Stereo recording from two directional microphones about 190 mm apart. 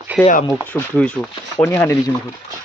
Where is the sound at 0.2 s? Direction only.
5° left (ahead or behind).